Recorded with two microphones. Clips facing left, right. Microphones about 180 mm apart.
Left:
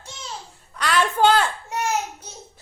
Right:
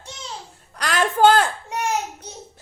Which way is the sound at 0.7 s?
45° right (ahead or behind).